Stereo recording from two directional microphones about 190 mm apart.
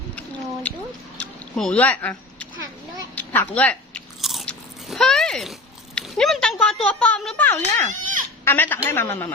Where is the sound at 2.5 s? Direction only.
20° right (ahead or behind).